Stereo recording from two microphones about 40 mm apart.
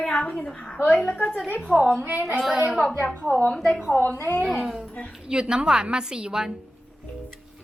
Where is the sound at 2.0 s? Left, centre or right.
Right.